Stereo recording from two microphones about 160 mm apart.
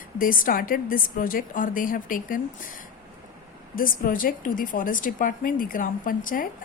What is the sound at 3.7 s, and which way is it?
A woman's voice, 60° left (ahead or behind).